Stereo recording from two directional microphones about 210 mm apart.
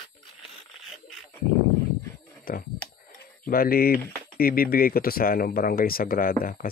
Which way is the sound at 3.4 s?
45° left (ahead or behind).